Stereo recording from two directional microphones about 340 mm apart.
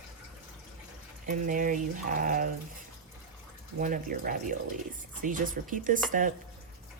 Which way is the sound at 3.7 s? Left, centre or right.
Right.